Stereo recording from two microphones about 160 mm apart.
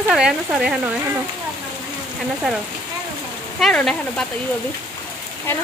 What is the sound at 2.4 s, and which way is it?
Speech, 5° right (ahead or behind).